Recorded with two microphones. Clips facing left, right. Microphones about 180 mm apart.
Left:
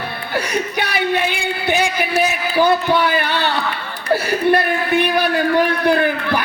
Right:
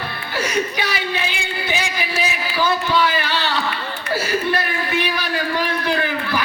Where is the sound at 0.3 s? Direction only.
60° left (ahead or behind).